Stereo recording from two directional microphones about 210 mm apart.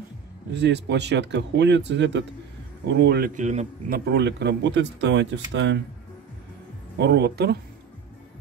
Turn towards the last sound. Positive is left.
turn(degrees=-55)  # may be behind; listen again after turning